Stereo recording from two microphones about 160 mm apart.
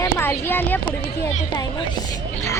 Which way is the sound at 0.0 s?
15° left (ahead or behind).